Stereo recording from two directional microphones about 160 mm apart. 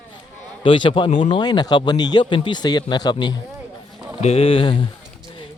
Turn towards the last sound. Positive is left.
turn(degrees=35)  # may be behind; listen again after turning